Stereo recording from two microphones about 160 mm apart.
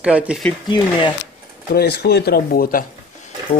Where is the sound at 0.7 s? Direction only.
30° left (ahead or behind).